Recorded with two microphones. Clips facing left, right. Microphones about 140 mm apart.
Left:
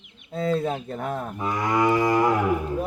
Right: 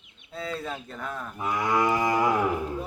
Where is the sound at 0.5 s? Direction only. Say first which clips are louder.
Left 8 dB; 25° left (ahead or behind).